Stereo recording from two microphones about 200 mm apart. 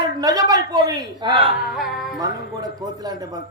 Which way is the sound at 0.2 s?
20° right (ahead or behind).